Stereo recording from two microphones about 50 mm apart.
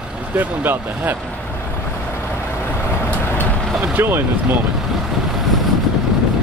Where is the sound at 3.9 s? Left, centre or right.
Right.